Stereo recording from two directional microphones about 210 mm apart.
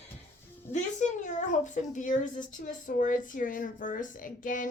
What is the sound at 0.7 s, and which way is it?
A woman's voice, 35° left (ahead or behind).